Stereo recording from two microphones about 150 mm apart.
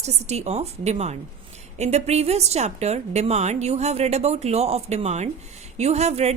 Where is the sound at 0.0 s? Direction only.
45° right (ahead or behind).